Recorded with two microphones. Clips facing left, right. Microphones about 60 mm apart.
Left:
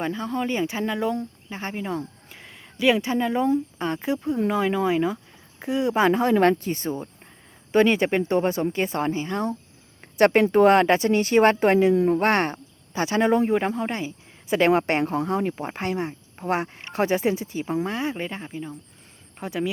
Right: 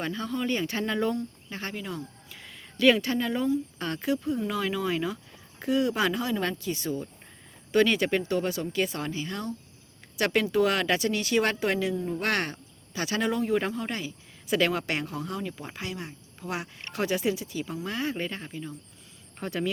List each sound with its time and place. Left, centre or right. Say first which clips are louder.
0.0 s speech: left 4 dB; centre
1.5 s speech: left 5 dB; left
11.9 s speech: left 11 dB; left
12.2 s speech: left 7 dB; left
17.8 s speech: left 3 dB; left